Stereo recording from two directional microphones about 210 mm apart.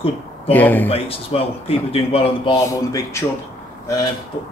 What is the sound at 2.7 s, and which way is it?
Speech, 15° left (ahead or behind).